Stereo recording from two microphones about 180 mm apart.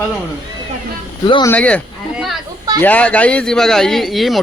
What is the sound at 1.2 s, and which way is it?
Speech, 25° left (ahead or behind).